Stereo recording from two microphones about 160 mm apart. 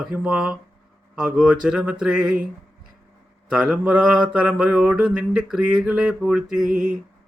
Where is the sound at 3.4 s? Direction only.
5° right (ahead or behind).